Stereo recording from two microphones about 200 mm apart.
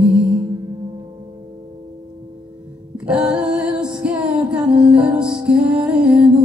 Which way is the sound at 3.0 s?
5° right (ahead or behind).